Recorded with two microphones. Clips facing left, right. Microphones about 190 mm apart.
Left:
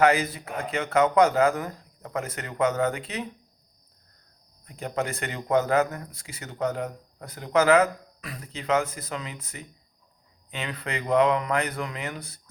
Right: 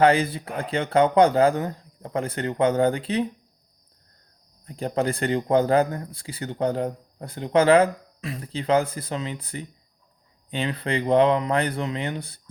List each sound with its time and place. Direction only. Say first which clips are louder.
0.0 s speech: right 3 dB; 30° right (ahead or behind)
4.6 s speech: right 5 dB; 35° right (ahead or behind)